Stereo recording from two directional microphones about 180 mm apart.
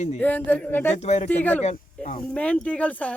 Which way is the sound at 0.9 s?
40° left (ahead or behind).